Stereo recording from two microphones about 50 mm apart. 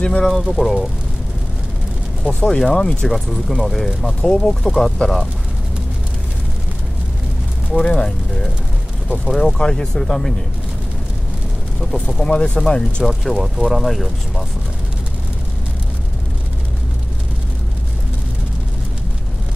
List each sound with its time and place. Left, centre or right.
0.5 s speech: centre
2.2 s speech: centre
3.1 s speech: centre
4.0 s speech: centre
7.7 s speech: centre
9.6 s speech: centre
11.8 s speech: centre
13.0 s speech: centre